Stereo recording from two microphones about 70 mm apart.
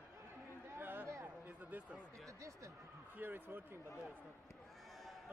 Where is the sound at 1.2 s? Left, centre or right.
Right.